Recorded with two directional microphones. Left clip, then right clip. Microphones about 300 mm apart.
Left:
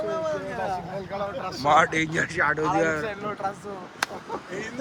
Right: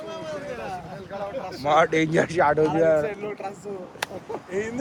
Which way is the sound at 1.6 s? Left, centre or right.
Centre.